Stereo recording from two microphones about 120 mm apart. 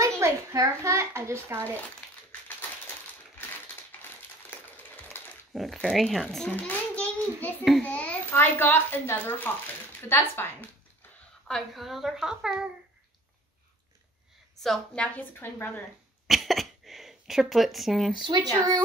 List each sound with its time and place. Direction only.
0.2 s a child's voice: 25° right (ahead or behind)
2.0 s crumpling: 10° left (ahead or behind)
4.0 s a sound: 15° left (ahead or behind)
5.5 s a woman's voice: centre (ahead or behind)
6.5 s a child's voice: 15° left (ahead or behind)
11.4 s a woman's voice: centre (ahead or behind)
14.6 s a woman's voice: 5° left (ahead or behind)
15.1 s a child's voice: 15° left (ahead or behind)
16.3 s a sound: centre (ahead or behind)
18.1 s speech: 40° right (ahead or behind)